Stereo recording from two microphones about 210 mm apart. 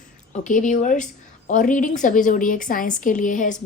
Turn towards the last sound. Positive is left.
turn(degrees=35)  # may be behind; listen again after turning